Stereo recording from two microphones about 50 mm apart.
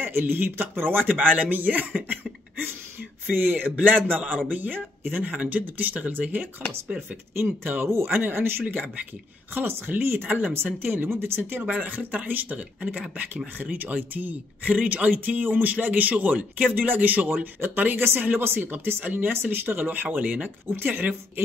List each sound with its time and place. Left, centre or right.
0.0 s speech: right
1.0 s speech: right
3.3 s speech: right
5.3 s speech: right
11.6 s speech: right
17.7 s speech: right
20.4 s speech: right
20.8 s speech: right